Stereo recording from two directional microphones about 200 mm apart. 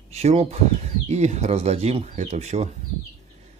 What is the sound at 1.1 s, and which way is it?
Speech, 35° right (ahead or behind).